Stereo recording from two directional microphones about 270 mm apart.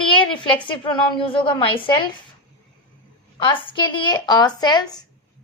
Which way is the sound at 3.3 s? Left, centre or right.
Centre.